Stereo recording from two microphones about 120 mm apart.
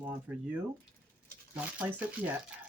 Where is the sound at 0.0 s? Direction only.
10° right (ahead or behind).